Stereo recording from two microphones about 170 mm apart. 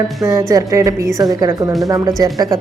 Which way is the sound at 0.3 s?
20° right (ahead or behind).